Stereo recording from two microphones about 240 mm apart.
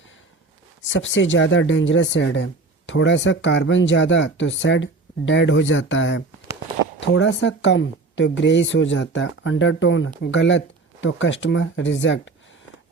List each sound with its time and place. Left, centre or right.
0.9 s speech: left